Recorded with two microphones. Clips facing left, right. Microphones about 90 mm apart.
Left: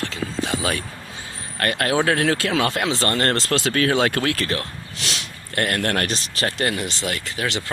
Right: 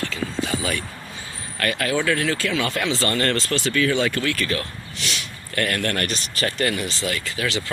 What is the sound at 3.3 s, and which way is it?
Speech, 80° left.